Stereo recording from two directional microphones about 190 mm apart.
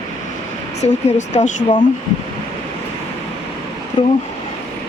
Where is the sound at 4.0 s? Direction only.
25° left (ahead or behind).